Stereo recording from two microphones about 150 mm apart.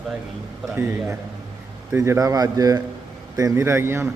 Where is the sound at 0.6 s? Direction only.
Centre (ahead or behind).